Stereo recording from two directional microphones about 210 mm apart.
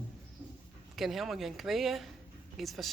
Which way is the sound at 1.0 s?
Centre (ahead or behind).